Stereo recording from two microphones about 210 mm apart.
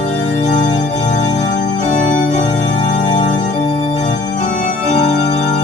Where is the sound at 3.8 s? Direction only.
35° left (ahead or behind).